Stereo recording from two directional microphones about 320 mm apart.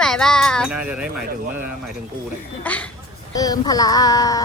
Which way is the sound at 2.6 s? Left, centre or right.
Centre.